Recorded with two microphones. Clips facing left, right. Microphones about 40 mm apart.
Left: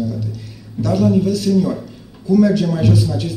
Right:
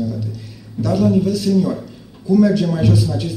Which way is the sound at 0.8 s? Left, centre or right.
Centre.